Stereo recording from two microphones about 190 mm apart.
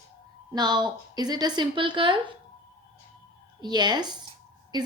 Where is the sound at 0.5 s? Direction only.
20° right (ahead or behind).